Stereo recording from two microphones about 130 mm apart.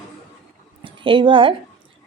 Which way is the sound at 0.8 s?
40° right (ahead or behind).